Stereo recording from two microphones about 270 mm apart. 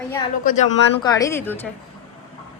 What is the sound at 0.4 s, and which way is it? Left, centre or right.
Speech, left.